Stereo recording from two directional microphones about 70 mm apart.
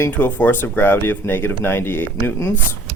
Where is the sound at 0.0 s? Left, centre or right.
Left.